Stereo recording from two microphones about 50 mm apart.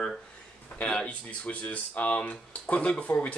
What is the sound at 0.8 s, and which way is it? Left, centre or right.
Speech, left.